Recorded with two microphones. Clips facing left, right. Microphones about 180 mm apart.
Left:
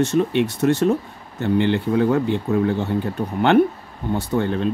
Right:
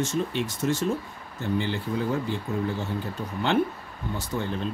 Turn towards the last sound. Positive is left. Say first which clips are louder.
# left 9 dB
turn(degrees=60)  # may be behind; listen again after turning